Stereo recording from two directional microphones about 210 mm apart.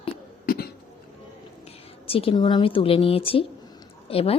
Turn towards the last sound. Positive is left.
turn(degrees=25)  # may be behind; listen again after turning